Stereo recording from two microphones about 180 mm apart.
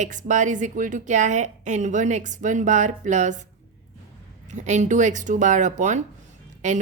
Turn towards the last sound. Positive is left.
turn(degrees=-40)  # may be behind; listen again after turning